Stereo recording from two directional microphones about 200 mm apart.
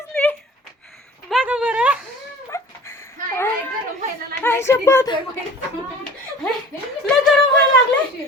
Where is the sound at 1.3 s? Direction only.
5° right (ahead or behind).